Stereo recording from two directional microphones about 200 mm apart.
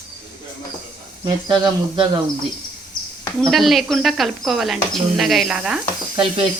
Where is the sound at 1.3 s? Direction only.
20° right (ahead or behind).